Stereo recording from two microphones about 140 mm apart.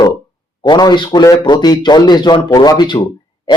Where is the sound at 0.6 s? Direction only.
30° left (ahead or behind).